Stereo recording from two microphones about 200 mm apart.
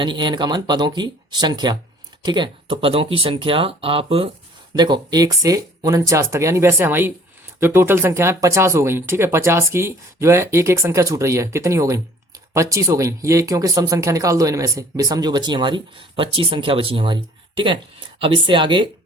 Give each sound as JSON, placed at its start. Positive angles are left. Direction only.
{"t": 0.0, "sound": "speech", "side_deg": -25}
{"t": 18.2, "sound": "speech", "side_deg": -25}